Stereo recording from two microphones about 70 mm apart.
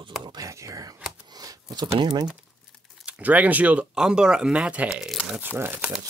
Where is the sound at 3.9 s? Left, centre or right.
Centre.